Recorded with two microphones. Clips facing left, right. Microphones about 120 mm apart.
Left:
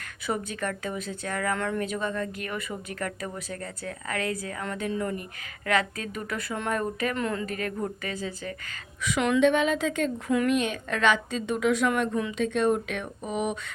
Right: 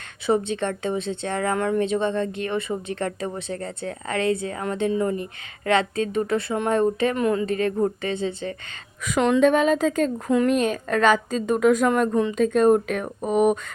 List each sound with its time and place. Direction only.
0.3 s a woman's voice: 25° right (ahead or behind)
9.0 s a woman's voice: 40° right (ahead or behind)